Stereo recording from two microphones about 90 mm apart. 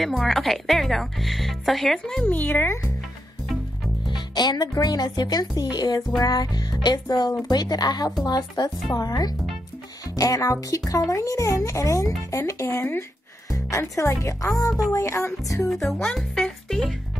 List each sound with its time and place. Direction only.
0.0 s speech: centre (ahead or behind)
2.2 s speech: 20° left (ahead or behind)
4.1 s speech: 55° left (ahead or behind); by 15.7 s 35° left (ahead or behind)
15.7 s speech: centre (ahead or behind)
16.1 s music: 5° left (ahead or behind)